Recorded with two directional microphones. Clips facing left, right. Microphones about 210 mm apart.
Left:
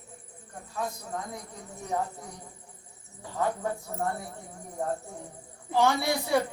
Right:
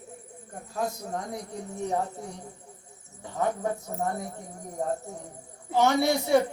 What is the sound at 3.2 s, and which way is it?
Speech, 20° right (ahead or behind).